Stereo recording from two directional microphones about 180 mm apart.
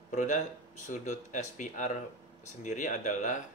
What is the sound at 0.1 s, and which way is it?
Speech, 45° left (ahead or behind).